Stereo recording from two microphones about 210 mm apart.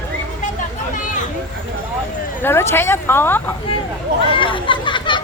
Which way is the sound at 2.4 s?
10° left (ahead or behind).